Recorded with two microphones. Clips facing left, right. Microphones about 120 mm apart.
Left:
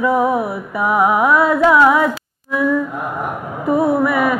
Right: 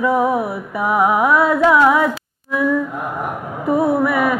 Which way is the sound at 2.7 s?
25° left (ahead or behind).